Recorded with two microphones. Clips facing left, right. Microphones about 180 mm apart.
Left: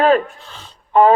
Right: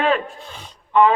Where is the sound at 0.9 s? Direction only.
40° left (ahead or behind).